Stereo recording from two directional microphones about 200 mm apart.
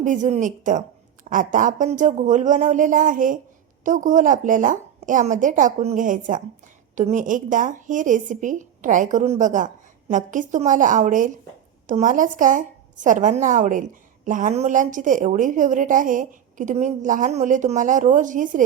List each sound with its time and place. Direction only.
0.0 s a woman's voice: 40° right (ahead or behind)